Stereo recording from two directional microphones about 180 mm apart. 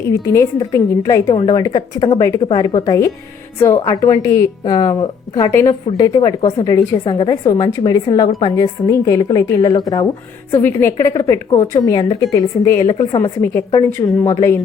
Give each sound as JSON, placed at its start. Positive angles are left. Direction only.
{"t": 0.3, "sound": "a woman's voice", "side_deg": 15}